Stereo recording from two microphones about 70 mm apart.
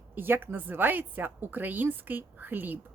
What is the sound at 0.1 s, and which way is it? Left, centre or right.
A woman's voice, right.